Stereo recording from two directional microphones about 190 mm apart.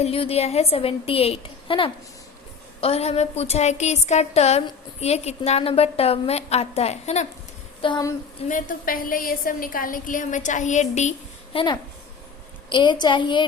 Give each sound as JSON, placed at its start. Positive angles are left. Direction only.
{"t": 0.0, "sound": "a woman's voice", "side_deg": 30}
{"t": 7.8, "sound": "a sound", "side_deg": 25}
{"t": 8.4, "sound": "a woman's voice", "side_deg": 45}
{"t": 11.5, "sound": "a woman's voice", "side_deg": 25}